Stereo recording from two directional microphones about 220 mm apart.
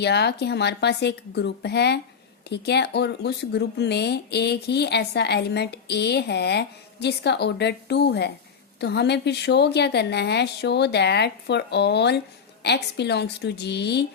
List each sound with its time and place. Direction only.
0.0 s speech: 50° left (ahead or behind)